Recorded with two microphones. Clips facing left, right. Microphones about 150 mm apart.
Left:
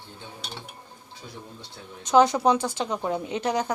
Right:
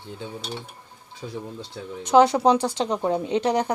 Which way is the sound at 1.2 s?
80° right.